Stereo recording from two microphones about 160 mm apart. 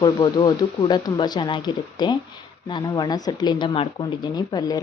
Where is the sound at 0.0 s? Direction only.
25° left (ahead or behind).